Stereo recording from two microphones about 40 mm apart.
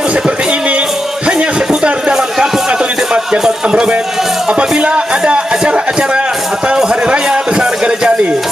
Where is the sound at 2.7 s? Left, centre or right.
Right.